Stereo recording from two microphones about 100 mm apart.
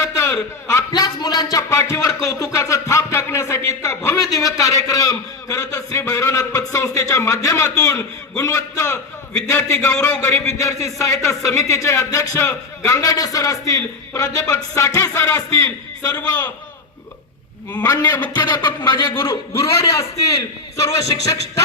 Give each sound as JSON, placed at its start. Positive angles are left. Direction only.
{"t": 0.0, "sound": "a sound", "side_deg": 30}
{"t": 0.9, "sound": "a man's voice", "side_deg": 40}
{"t": 1.8, "sound": "a man's voice", "side_deg": 25}
{"t": 17.8, "sound": "a man's voice", "side_deg": 40}
{"t": 19.1, "sound": "a man's voice", "side_deg": 30}